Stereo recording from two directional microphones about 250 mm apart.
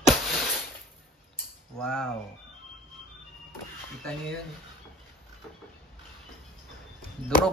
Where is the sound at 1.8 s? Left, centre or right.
Centre.